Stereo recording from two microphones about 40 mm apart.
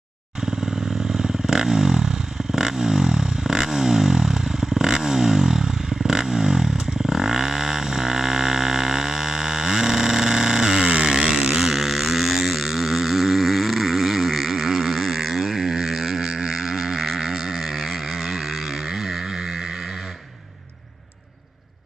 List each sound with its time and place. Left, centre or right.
0.4 s motorcycle: centre
0.8 s motorcycle: centre
1.2 s vehicle: centre
16.3 s didgeridoo: centre